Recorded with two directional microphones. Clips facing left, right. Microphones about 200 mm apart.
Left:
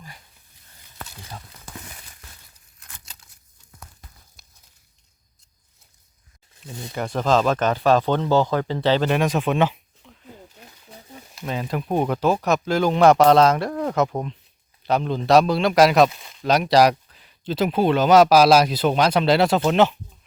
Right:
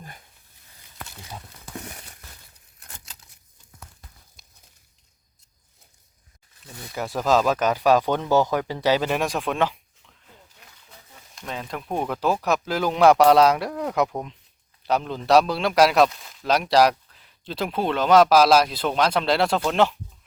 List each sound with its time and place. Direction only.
1.7 s a sound: 50° right (ahead or behind)
6.7 s speech: 25° left (ahead or behind)
6.9 s speech: 5° right (ahead or behind)
10.6 s wild animals: 30° left (ahead or behind)
11.3 s speech: 5° left (ahead or behind)
14.1 s speech: centre (ahead or behind)